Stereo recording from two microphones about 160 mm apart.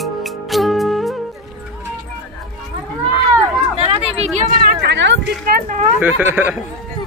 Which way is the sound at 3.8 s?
40° right (ahead or behind).